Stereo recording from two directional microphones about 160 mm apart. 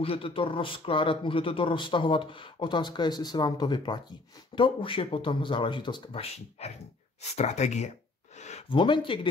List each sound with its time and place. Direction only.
0.0 s speech: 35° left (ahead or behind)
8.4 s a sound: 45° left (ahead or behind)
8.7 s speech: 30° left (ahead or behind)